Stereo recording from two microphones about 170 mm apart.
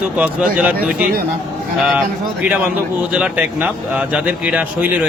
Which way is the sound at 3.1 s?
10° right (ahead or behind).